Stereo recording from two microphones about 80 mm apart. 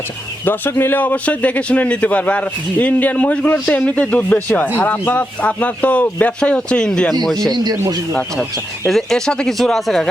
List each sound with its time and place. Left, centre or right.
0.4 s a man's voice: left; by 7.2 s centre
7.5 s speech: right
8.9 s speech: centre